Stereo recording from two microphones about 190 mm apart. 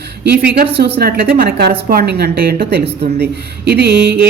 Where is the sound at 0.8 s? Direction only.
60° right (ahead or behind).